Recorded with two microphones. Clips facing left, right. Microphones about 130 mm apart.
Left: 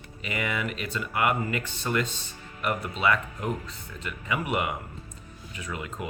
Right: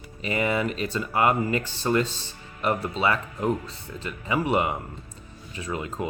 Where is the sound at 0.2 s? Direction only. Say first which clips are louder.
Right 6 dB; 35° right (ahead or behind).